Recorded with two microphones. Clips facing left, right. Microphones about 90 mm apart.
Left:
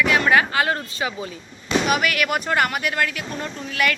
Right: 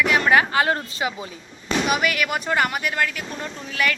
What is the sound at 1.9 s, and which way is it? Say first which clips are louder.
Speech: even; centre (ahead or behind).